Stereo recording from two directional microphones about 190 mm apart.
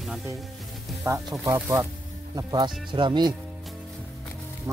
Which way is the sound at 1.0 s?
15° right (ahead or behind).